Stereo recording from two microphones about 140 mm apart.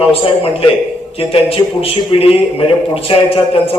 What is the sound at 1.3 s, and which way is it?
A man's voice, 40° left (ahead or behind).